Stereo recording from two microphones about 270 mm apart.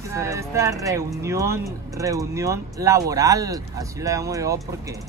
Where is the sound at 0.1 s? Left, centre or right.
Centre.